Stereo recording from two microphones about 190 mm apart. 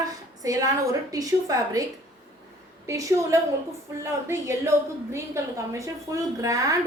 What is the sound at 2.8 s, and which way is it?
A woman's voice, 15° right (ahead or behind).